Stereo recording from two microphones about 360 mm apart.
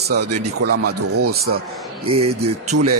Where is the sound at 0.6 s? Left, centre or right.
Right.